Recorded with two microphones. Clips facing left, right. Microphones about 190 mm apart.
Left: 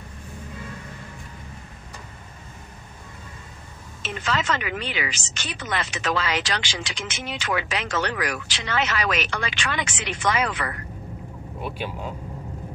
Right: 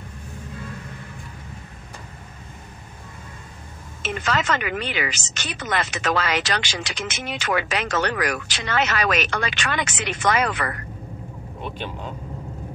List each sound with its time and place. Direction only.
4.1 s speech: 60° right (ahead or behind)
5.6 s speech: 65° right (ahead or behind)
5.9 s speech: 50° right (ahead or behind)
11.6 s speech: 5° left (ahead or behind)